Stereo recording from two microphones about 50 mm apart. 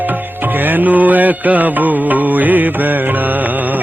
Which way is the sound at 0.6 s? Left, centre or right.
Right.